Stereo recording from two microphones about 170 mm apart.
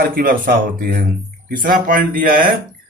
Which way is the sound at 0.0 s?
55° right (ahead or behind).